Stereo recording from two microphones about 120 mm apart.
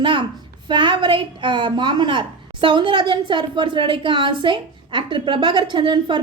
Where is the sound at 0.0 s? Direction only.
45° right (ahead or behind).